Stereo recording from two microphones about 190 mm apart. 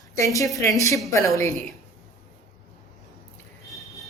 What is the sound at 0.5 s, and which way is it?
Speech, 15° left (ahead or behind).